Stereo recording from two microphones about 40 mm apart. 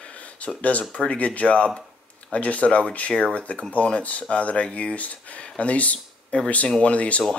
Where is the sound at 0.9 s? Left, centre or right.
Left.